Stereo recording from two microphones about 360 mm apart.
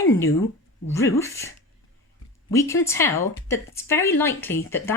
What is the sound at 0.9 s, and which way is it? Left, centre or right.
Speech, centre.